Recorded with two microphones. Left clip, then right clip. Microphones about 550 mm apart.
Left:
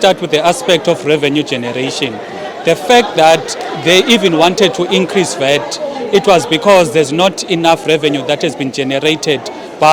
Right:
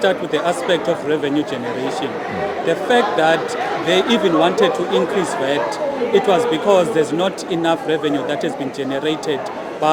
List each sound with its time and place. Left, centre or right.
0.0 s speech: left
2.6 s speech: left